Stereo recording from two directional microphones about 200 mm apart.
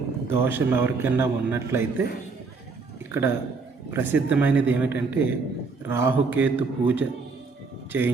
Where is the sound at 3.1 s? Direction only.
10° right (ahead or behind).